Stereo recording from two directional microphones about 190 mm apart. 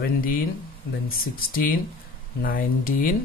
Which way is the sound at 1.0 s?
50° left (ahead or behind).